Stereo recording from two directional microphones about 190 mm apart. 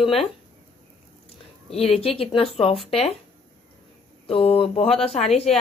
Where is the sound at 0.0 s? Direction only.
30° left (ahead or behind).